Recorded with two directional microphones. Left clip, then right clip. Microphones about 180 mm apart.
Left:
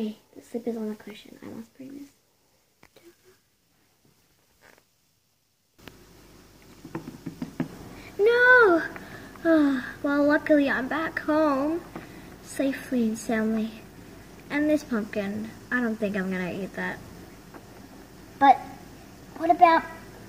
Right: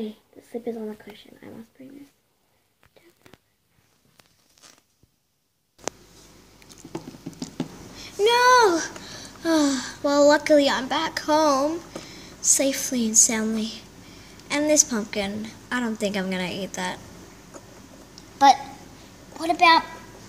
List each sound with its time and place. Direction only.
0.0 s speech: 15° left (ahead or behind)
8.0 s a woman's voice: 50° right (ahead or behind)
19.3 s a woman's voice: 15° right (ahead or behind)